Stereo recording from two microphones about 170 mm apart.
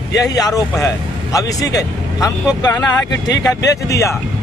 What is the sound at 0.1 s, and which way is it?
Speech, 20° left (ahead or behind).